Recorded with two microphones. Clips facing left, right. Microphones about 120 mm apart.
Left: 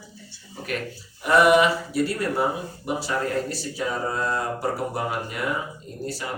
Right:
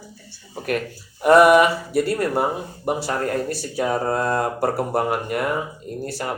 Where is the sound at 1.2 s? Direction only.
50° right (ahead or behind).